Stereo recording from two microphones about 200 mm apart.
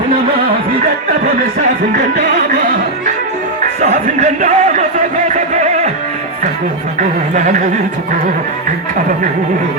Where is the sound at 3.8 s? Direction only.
40° right (ahead or behind).